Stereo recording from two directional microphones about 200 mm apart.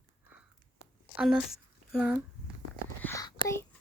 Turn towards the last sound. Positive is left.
turn(degrees=15)  # may be behind; listen again after turning